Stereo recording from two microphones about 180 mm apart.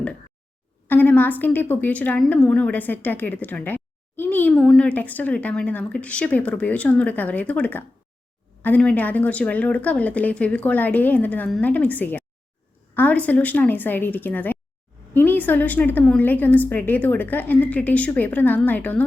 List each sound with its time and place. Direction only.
0.9 s a woman's voice: 10° left (ahead or behind)